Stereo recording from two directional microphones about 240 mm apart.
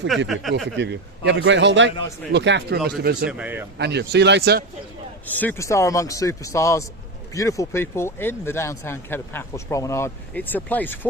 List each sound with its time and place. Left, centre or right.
0.1 s speech: centre
0.8 s a man's voice: right
3.2 s speech: centre
3.8 s a man's voice: right
5.2 s speech: centre